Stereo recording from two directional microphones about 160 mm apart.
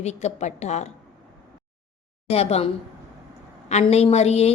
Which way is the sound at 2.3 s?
40° left (ahead or behind).